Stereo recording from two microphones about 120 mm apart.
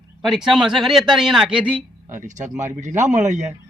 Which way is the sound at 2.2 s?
90° right.